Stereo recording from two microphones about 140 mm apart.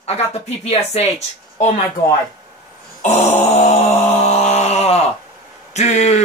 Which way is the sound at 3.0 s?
55° left (ahead or behind).